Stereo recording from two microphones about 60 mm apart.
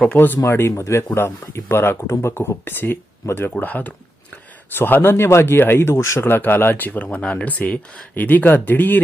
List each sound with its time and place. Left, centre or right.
0.4 s a man's voice: left
3.5 s a man's voice: left
6.2 s speech: left